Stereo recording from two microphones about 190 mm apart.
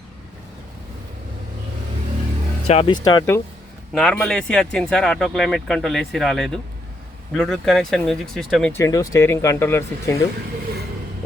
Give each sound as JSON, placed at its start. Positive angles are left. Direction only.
{"t": 2.6, "sound": "speech", "side_deg": 30}
{"t": 3.9, "sound": "speech", "side_deg": 5}
{"t": 8.7, "sound": "speech", "side_deg": 20}